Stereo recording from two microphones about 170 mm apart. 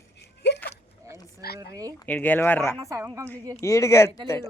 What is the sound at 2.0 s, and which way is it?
Speech, 10° left (ahead or behind).